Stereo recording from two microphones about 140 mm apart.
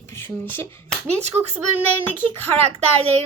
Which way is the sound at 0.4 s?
15° left (ahead or behind).